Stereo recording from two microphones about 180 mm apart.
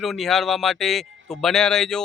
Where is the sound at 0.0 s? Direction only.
Centre (ahead or behind).